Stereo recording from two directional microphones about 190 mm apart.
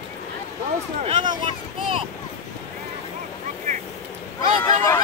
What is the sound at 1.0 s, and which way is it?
Speech, 25° right (ahead or behind).